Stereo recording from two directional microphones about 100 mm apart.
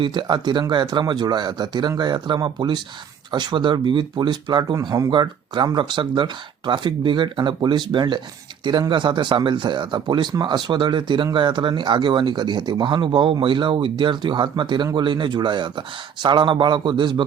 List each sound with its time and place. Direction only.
0.0 s speech: 50° right (ahead or behind)